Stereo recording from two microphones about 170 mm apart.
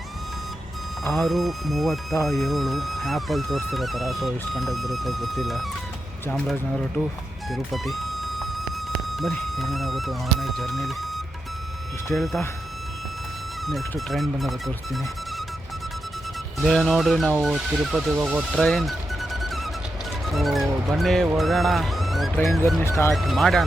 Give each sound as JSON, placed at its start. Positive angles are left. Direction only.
{"t": 1.0, "sound": "speech", "side_deg": 0}
{"t": 7.5, "sound": "music", "side_deg": 0}
{"t": 9.1, "sound": "speech", "side_deg": 0}
{"t": 12.1, "sound": "speech", "side_deg": 0}
{"t": 14.1, "sound": "speech", "side_deg": 0}
{"t": 16.6, "sound": "speech", "side_deg": 0}
{"t": 22.8, "sound": "speech", "side_deg": 15}
{"t": 23.1, "sound": "speech", "side_deg": 0}